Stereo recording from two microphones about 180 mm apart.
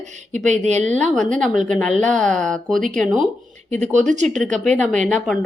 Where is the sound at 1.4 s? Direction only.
Centre (ahead or behind).